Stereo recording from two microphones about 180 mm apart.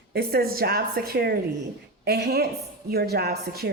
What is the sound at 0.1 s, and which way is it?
A woman's voice, 60° right (ahead or behind).